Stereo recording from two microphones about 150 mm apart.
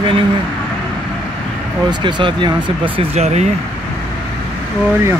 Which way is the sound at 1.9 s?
30° right (ahead or behind).